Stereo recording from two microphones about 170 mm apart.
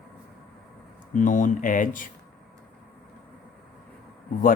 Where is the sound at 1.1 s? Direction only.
50° left (ahead or behind).